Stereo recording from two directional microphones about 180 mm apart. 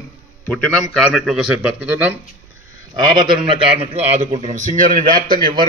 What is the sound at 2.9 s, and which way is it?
A man's voice, 25° right (ahead or behind).